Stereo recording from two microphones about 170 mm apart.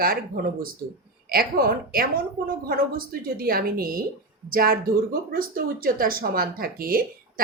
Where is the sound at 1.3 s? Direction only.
60° right (ahead or behind).